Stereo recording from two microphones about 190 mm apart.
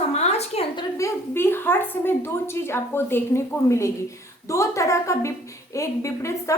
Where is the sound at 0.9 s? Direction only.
15° left (ahead or behind).